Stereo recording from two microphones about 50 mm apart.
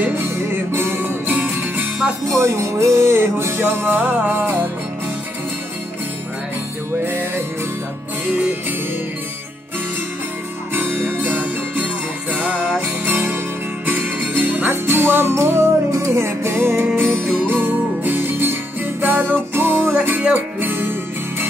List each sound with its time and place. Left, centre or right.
0.1 s music: right
2.2 s music: right
4.3 s music: right
7.1 s music: right
8.4 s music: right
10.7 s music: right
19.9 s music: right